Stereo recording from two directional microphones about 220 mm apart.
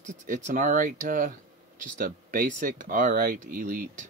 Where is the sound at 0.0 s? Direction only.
35° right (ahead or behind).